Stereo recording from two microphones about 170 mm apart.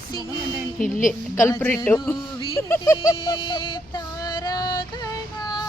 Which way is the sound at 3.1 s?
25° left (ahead or behind).